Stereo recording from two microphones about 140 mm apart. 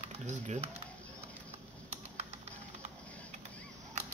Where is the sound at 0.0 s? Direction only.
55° right (ahead or behind).